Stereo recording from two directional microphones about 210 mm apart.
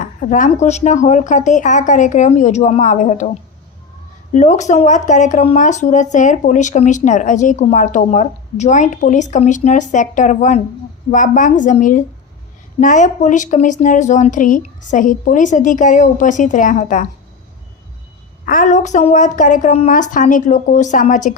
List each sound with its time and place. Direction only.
0.0 s speech: 35° left (ahead or behind)
4.4 s speech: 35° left (ahead or behind)
18.4 s speech: 40° left (ahead or behind)